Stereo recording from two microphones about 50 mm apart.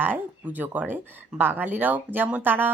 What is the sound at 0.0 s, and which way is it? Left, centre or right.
Speech, right.